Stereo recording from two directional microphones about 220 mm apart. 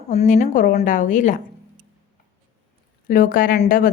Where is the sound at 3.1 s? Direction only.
40° left (ahead or behind).